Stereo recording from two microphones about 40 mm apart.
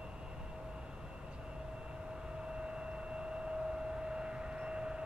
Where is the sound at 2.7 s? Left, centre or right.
Right.